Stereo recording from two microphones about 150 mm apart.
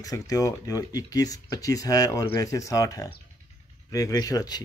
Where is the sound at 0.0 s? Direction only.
25° left (ahead or behind).